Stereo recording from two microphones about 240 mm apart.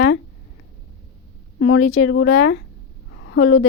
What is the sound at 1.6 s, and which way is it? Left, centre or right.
A woman's voice, left.